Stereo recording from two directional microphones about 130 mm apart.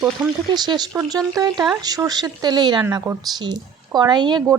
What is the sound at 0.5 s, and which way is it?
Speech, 35° right (ahead or behind).